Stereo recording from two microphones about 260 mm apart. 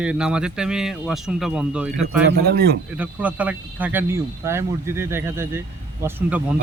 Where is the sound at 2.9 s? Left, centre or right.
Centre.